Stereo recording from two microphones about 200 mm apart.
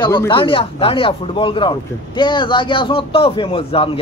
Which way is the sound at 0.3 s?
25° left (ahead or behind).